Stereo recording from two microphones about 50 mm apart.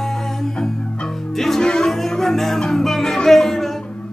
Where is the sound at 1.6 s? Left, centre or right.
Centre.